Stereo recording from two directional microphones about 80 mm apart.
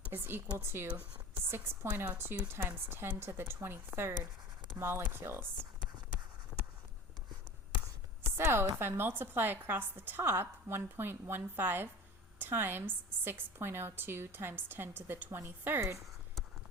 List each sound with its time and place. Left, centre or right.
0.1 s a woman's voice: right
8.2 s chopping: right
8.8 s a woman's voice: right